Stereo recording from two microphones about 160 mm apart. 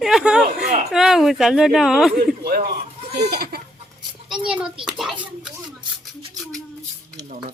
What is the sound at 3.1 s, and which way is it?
Speech, 75° right (ahead or behind).